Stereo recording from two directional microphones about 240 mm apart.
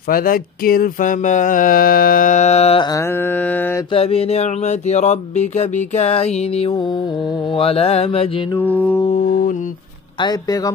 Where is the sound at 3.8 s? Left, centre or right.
Left.